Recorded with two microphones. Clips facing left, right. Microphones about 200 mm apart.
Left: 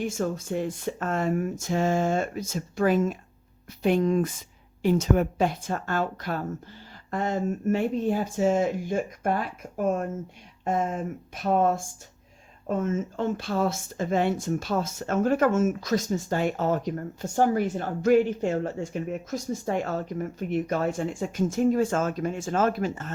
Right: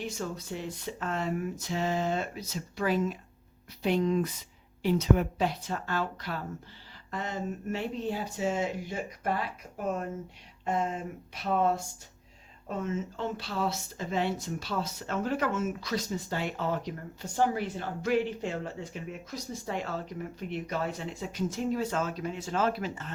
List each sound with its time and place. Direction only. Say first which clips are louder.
0.0 s speech: left 7 dB; 50° left (ahead or behind)